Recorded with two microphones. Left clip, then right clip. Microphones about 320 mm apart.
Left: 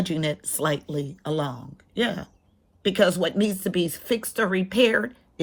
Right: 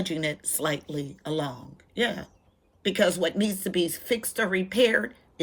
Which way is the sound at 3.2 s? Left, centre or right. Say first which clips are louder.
Left 3 dB; left.